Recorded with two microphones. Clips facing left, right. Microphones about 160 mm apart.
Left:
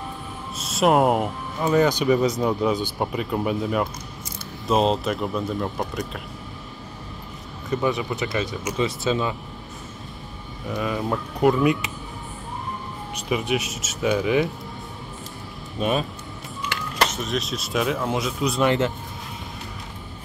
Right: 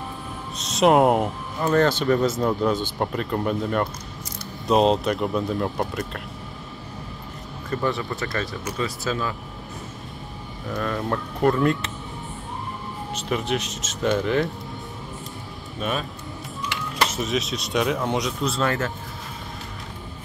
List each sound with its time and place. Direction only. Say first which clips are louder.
0.6 s speech: right 2 dB; 5° left (ahead or behind)
7.7 s speech: left 2 dB; centre (ahead or behind)
9.0 s speech: left 3 dB; 25° left (ahead or behind)
10.7 s speech: left 1 dB; 5° left (ahead or behind)
13.3 s speech: left 2 dB; 5° left (ahead or behind)
15.8 s speech: left 4 dB; 35° left (ahead or behind)
16.7 s speech: left 1 dB; centre (ahead or behind)
18.4 s speech: left 3 dB; 15° left (ahead or behind)